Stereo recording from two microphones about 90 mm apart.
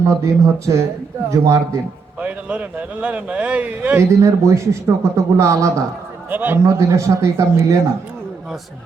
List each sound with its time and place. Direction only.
0.0 s speech: 35° right (ahead or behind)
2.2 s a man's voice: 15° right (ahead or behind)
4.1 s speech: 35° right (ahead or behind)
6.3 s a man's voice: 20° right (ahead or behind)
6.7 s speech: 35° right (ahead or behind)